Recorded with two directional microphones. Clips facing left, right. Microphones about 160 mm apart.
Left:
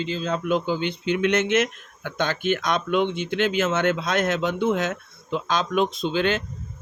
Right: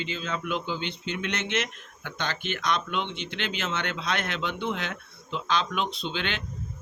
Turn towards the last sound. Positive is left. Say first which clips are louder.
# left 9 dB
turn(degrees=45)  # may be behind; listen again after turning